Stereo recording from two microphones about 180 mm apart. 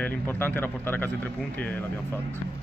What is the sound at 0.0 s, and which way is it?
Speech, 10° left (ahead or behind).